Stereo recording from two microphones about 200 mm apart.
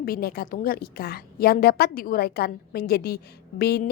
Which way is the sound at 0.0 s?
50° left (ahead or behind).